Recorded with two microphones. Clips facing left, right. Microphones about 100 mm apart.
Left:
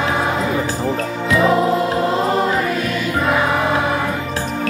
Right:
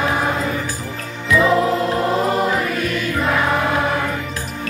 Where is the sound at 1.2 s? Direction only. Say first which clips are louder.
Even; 35° left (ahead or behind).